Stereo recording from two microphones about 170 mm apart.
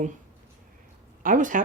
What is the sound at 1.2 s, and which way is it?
Speech, 50° right (ahead or behind).